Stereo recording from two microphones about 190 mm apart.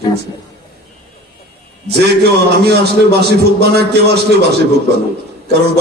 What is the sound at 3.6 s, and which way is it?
Speech, 60° right (ahead or behind).